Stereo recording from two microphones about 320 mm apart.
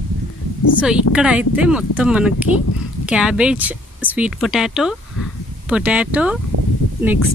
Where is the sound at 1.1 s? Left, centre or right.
Centre.